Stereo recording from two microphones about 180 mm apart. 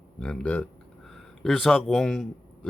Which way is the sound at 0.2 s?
5° left (ahead or behind).